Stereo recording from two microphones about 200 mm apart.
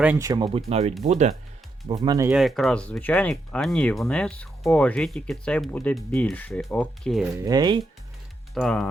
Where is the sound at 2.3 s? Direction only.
Centre (ahead or behind).